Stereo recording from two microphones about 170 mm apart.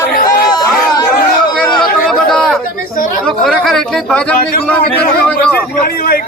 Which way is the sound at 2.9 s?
55° left (ahead or behind).